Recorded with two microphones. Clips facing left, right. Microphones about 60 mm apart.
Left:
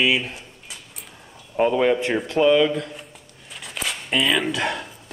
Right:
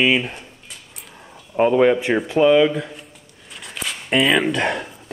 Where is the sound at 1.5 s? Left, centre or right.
Centre.